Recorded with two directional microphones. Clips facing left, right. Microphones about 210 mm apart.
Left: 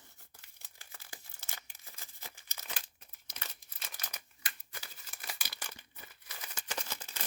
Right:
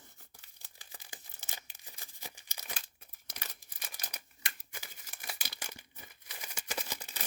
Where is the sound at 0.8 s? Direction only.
15° right (ahead or behind).